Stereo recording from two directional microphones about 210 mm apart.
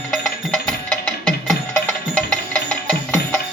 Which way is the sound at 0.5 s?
5° left (ahead or behind).